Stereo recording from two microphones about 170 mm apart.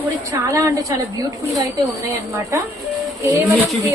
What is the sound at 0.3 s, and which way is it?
A woman's voice, 15° right (ahead or behind).